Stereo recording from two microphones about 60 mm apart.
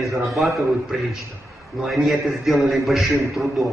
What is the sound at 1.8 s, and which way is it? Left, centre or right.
A man's voice, centre.